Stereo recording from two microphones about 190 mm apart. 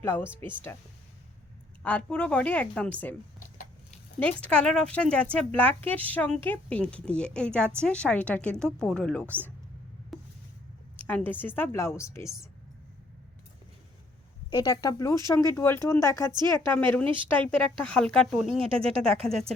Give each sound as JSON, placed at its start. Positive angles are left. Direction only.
{"t": 0.0, "sound": "speech", "side_deg": 10}
{"t": 1.8, "sound": "speech", "side_deg": 5}
{"t": 4.2, "sound": "a woman's voice", "side_deg": 5}
{"t": 10.1, "sound": "a sound", "side_deg": 0}
{"t": 11.0, "sound": "speech", "side_deg": 10}
{"t": 14.5, "sound": "a woman's voice", "side_deg": 20}
{"t": 18.7, "sound": "speech", "side_deg": -30}
{"t": 19.0, "sound": "a woman's voice", "side_deg": 0}